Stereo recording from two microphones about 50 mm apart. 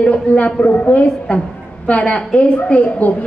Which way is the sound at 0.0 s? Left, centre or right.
Left.